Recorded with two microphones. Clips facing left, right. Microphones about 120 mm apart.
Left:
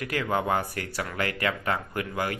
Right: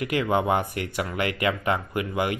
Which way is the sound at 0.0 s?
15° right (ahead or behind).